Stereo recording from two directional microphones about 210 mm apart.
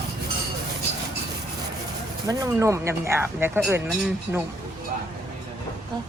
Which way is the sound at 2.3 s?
15° right (ahead or behind).